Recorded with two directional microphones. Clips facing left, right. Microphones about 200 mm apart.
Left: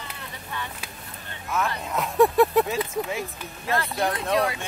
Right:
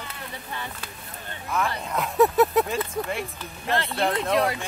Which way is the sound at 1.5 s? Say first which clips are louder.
Even; centre (ahead or behind).